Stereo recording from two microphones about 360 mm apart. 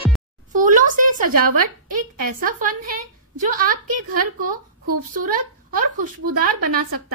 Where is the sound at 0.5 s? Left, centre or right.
Right.